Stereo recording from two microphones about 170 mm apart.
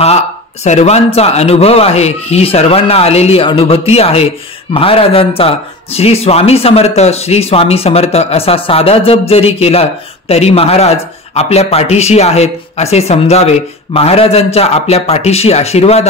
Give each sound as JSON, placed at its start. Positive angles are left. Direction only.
{"t": 0.7, "sound": "a man's voice", "side_deg": 40}